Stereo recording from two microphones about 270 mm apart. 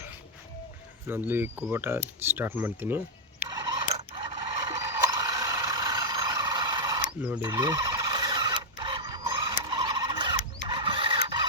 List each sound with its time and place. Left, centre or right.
1.0 s speech: centre
3.4 s a sound: centre
3.9 s coin: right
4.9 s mechanisms: centre